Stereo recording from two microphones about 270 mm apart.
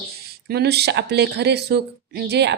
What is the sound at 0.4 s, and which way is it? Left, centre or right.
Speech, right.